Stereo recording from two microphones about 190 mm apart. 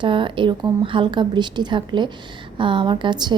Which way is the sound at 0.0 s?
25° right (ahead or behind).